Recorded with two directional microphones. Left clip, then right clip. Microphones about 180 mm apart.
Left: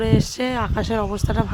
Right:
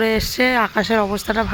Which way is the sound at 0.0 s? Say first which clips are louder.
Right 5 dB; 15° right (ahead or behind).